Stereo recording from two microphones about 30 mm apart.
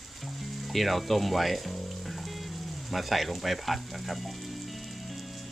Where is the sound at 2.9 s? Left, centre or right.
Centre.